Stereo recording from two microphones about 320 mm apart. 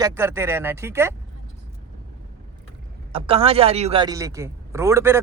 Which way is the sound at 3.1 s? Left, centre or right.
Centre.